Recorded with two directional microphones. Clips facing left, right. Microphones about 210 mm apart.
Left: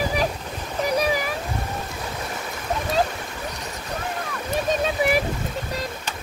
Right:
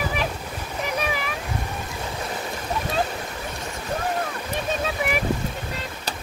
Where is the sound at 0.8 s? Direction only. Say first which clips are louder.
Left 5 dB; 35° left (ahead or behind).